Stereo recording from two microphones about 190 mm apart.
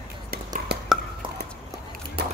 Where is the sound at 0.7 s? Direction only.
60° right (ahead or behind).